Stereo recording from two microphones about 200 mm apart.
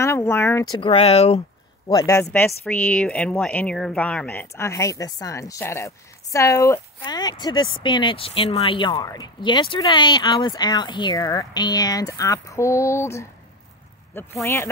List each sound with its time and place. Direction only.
0.0 s speech: 15° left (ahead or behind)
0.7 s speech: 30° left (ahead or behind)
1.9 s speech: 15° left (ahead or behind)